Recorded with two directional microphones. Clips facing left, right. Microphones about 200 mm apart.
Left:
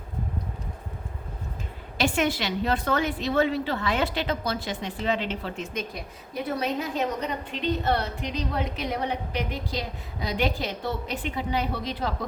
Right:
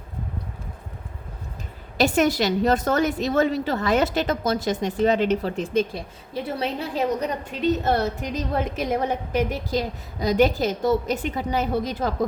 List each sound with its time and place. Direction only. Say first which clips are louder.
2.0 s a woman's voice: right 5 dB; 40° right (ahead or behind)
7.6 s a woman's voice: right 5 dB; 45° right (ahead or behind)